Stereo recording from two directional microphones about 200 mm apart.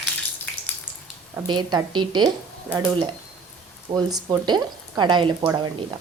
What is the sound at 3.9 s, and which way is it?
A woman's voice, 20° right (ahead or behind).